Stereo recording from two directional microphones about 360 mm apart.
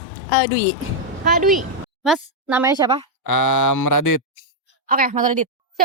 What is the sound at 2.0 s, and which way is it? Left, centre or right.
A woman's voice, centre.